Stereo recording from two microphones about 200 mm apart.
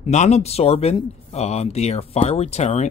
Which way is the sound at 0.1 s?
35° left (ahead or behind).